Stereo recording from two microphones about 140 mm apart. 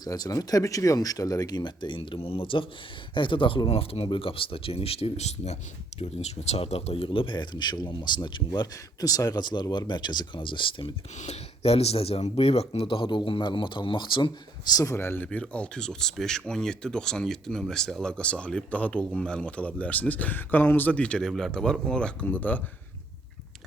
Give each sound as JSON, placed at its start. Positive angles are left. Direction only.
{"t": 0.0, "sound": "speech", "side_deg": 25}
{"t": 11.2, "sound": "speech", "side_deg": 50}
{"t": 14.7, "sound": "speech", "side_deg": 25}